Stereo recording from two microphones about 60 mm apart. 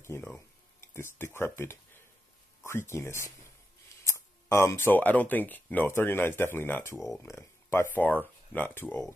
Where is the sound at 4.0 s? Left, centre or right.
Left.